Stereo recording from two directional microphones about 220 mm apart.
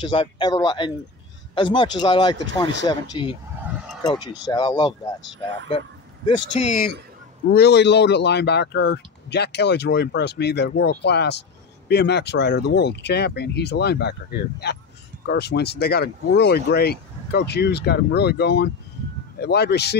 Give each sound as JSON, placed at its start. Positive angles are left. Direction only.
{"t": 0.0, "sound": "speech", "side_deg": 20}
{"t": 3.6, "sound": "vehicle", "side_deg": -5}
{"t": 4.0, "sound": "speech", "side_deg": 20}
{"t": 6.2, "sound": "speech", "side_deg": 35}
{"t": 7.5, "sound": "a man's voice", "side_deg": 50}